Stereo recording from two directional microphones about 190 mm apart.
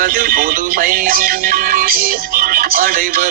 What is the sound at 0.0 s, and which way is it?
Speech, 50° right (ahead or behind).